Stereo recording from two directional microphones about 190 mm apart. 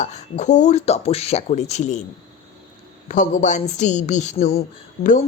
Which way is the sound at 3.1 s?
40° left (ahead or behind).